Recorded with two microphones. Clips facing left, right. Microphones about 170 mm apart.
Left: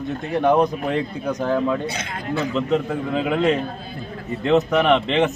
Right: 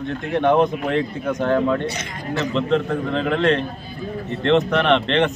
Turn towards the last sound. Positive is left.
turn(degrees=5)  # may be behind; listen again after turning